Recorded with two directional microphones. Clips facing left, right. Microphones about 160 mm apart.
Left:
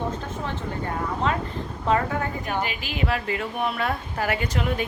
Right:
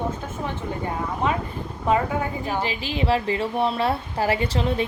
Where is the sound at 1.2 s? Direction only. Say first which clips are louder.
Right 1 dB; 15° right (ahead or behind).